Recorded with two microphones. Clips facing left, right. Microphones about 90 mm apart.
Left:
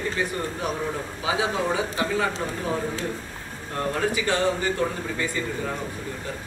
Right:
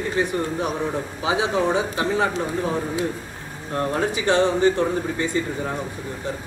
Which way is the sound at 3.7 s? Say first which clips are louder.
Right 2 dB; 25° right (ahead or behind).